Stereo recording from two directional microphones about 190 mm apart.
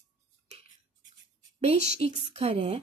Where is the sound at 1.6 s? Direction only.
35° right (ahead or behind).